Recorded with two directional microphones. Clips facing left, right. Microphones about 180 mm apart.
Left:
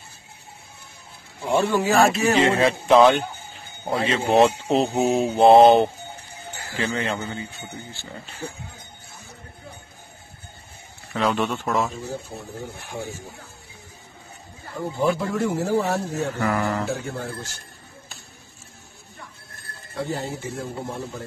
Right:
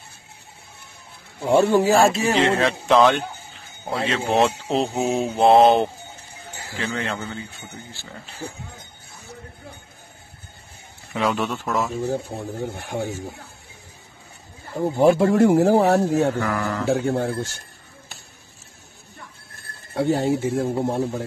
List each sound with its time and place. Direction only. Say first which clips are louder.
1.5 s speech: right 4 dB; 40° right (ahead or behind)
2.0 s speech: even; 30° right (ahead or behind)
2.3 s speech: left 1 dB; centre (ahead or behind)
11.1 s speech: even; centre (ahead or behind)
12.0 s speech: right 7 dB; 60° right (ahead or behind)
15.0 s speech: right 7 dB; 45° right (ahead or behind)
15.2 s speech: right 8 dB; 60° right (ahead or behind)
16.3 s speech: left 1 dB; 10° left (ahead or behind)
16.8 s speech: right 7 dB; 55° right (ahead or behind)
19.9 s speech: right 8 dB; 60° right (ahead or behind)